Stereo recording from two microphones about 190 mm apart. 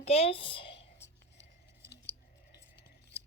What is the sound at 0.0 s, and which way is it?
Speech, 35° left (ahead or behind).